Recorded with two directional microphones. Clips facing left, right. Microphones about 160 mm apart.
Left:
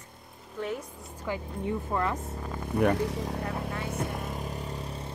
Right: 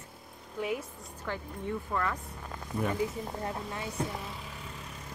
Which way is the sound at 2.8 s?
80° left.